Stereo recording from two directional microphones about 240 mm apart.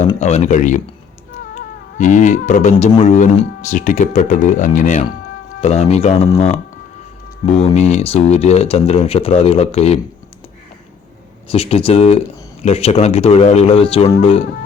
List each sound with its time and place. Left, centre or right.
0.1 s speech: left
11.4 s speech: left